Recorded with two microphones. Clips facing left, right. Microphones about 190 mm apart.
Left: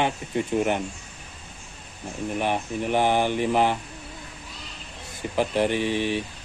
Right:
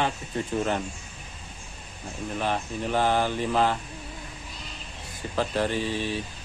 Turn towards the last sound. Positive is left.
turn(degrees=15)  # may be behind; listen again after turning